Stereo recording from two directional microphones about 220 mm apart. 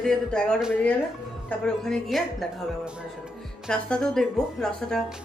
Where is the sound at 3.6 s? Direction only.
5° left (ahead or behind).